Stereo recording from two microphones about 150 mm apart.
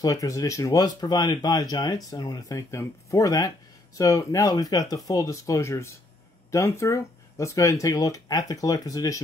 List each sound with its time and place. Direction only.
0.0 s speech: 20° left (ahead or behind)